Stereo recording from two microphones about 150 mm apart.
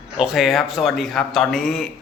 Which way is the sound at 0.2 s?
5° right (ahead or behind).